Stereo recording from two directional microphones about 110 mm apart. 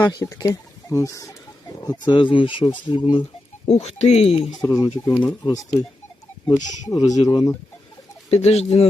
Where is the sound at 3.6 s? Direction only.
75° left (ahead or behind).